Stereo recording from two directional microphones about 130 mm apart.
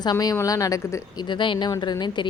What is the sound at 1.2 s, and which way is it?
A woman's voice, 40° left (ahead or behind).